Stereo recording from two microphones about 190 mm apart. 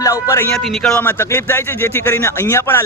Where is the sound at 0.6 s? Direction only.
Centre (ahead or behind).